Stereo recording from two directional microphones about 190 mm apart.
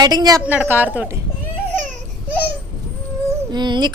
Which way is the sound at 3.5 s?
20° right (ahead or behind).